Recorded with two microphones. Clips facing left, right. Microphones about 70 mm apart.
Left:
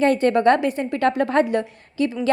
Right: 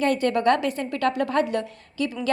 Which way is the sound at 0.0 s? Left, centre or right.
Left.